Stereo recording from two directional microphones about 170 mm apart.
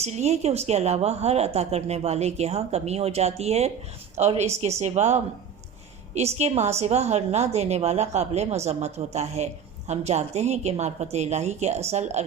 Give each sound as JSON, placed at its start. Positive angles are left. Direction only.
{"t": 0.0, "sound": "a woman's voice", "side_deg": -40}